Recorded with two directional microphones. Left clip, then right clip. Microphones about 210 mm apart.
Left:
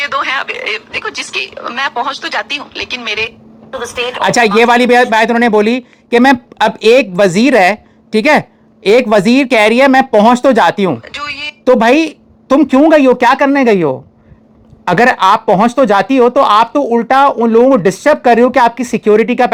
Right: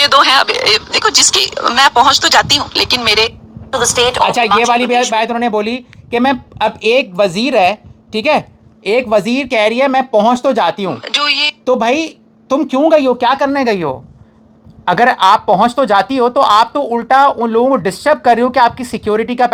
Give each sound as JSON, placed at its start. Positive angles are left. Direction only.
{"t": 0.0, "sound": "speech", "side_deg": -60}
{"t": 4.2, "sound": "speech", "side_deg": 50}
{"t": 11.0, "sound": "speech", "side_deg": -60}
{"t": 11.6, "sound": "a woman's voice", "side_deg": 50}